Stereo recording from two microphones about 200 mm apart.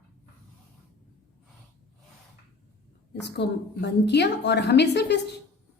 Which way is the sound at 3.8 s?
60° left (ahead or behind).